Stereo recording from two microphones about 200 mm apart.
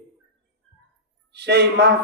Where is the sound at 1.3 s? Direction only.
55° right (ahead or behind).